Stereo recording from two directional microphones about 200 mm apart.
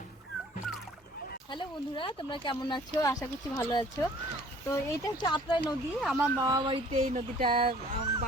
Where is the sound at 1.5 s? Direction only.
25° left (ahead or behind).